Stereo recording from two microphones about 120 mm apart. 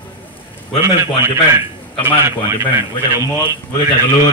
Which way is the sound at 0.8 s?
20° right (ahead or behind).